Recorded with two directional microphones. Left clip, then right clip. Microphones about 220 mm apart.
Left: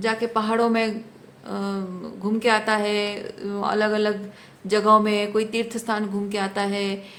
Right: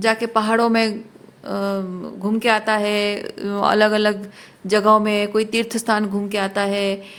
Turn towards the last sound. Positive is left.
turn(degrees=-30)  # may be behind; listen again after turning